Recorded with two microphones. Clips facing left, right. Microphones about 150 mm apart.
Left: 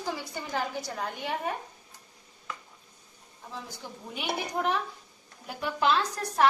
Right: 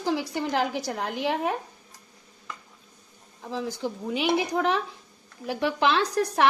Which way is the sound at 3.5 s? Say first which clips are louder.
Right 11 dB; 90° right.